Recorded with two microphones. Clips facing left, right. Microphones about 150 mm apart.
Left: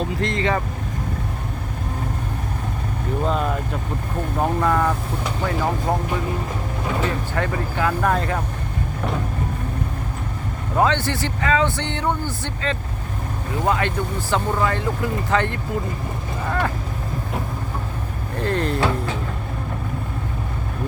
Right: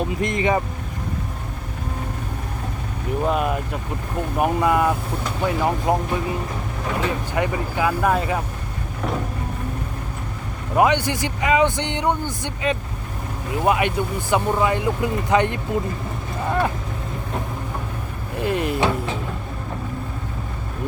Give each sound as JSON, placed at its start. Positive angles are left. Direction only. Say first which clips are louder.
{"t": 0.0, "sound": "a man's voice", "louder": "right 1 dB", "side_deg": -15}
{"t": 3.2, "sound": "a man's voice", "louder": "right 2 dB", "side_deg": -10}
{"t": 7.3, "sound": "a man's voice", "louder": "right 1 dB", "side_deg": -10}
{"t": 10.8, "sound": "a man's voice", "louder": "right 2 dB", "side_deg": -15}
{"t": 16.5, "sound": "a sound", "louder": "right 2 dB", "side_deg": -20}
{"t": 18.3, "sound": "a man's voice", "louder": "even", "side_deg": -10}